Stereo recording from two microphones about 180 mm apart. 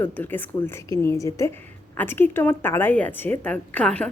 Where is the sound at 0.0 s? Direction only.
10° left (ahead or behind).